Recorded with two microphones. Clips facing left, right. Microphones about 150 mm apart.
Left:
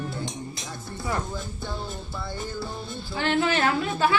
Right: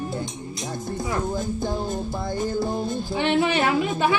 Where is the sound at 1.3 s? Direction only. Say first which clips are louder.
Right 8 dB; 45° right (ahead or behind).